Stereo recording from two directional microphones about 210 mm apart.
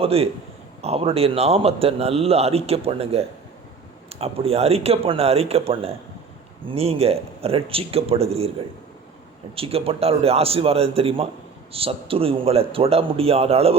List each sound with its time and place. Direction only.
0.0 s a man's voice: 30° right (ahead or behind)
9.6 s a man's voice: 30° right (ahead or behind)